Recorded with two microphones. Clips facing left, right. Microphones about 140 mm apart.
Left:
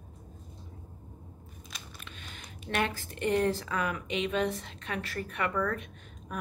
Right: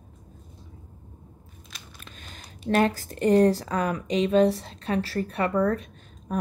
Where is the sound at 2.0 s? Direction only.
40° right (ahead or behind).